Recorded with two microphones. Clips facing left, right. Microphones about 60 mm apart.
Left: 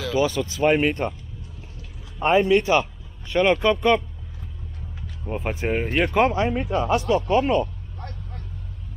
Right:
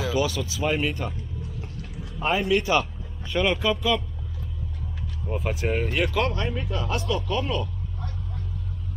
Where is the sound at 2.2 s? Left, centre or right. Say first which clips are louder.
Left 5 dB; centre.